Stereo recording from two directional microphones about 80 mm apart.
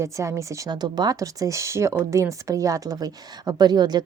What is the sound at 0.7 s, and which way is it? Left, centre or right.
Speech, right.